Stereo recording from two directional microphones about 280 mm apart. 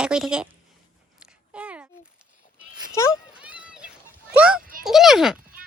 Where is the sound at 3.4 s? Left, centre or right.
Centre.